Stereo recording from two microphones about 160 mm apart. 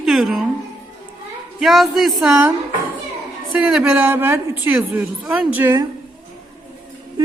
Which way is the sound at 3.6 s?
5° right (ahead or behind).